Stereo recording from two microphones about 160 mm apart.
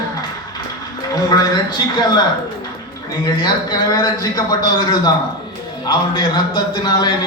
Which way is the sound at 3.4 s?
25° left (ahead or behind).